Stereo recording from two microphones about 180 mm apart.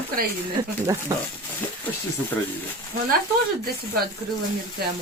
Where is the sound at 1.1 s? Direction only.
15° right (ahead or behind).